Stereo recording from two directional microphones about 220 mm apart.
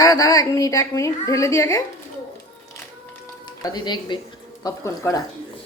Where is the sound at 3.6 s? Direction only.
20° left (ahead or behind).